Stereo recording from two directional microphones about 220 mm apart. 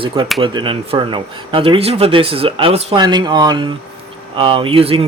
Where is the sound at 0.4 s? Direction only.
20° right (ahead or behind).